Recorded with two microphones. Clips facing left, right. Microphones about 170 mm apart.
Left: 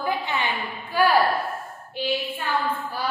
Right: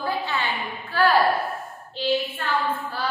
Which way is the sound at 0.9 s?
10° left (ahead or behind).